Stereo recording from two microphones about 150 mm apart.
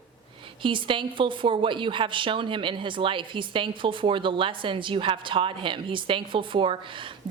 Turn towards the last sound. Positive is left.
turn(degrees=-35)  # may be behind; listen again after turning